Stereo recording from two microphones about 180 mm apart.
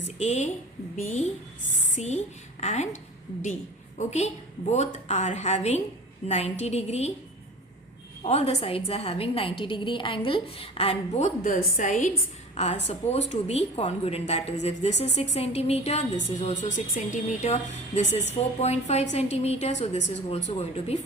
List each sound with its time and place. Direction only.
0.2 s a woman's voice: 40° left (ahead or behind)
3.9 s a woman's voice: 40° left (ahead or behind)
8.2 s a woman's voice: 35° left (ahead or behind)